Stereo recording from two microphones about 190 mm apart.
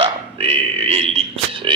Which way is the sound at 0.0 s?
30° right (ahead or behind).